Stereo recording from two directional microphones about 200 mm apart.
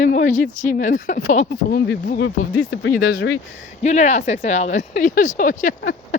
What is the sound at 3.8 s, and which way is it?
Speech, 35° left (ahead or behind).